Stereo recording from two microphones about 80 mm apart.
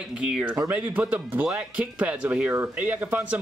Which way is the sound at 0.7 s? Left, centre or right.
Right.